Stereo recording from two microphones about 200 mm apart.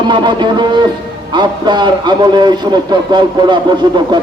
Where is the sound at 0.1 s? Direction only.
20° right (ahead or behind).